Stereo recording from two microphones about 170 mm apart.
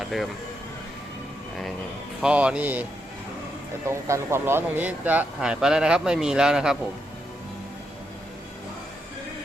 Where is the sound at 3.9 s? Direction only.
15° right (ahead or behind).